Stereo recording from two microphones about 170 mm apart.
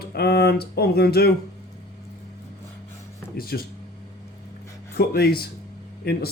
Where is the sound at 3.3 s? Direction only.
65° left (ahead or behind).